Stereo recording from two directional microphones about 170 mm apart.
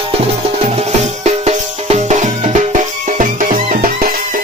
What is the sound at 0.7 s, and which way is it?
Music, 40° right (ahead or behind).